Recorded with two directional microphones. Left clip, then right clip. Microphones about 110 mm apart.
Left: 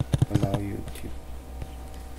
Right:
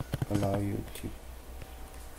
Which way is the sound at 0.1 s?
25° right (ahead or behind).